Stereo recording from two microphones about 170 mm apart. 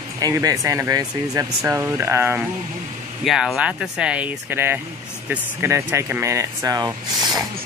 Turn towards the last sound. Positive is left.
turn(degrees=-25)  # may be behind; listen again after turning